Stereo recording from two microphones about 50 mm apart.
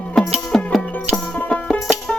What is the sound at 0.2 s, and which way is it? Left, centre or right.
Music, centre.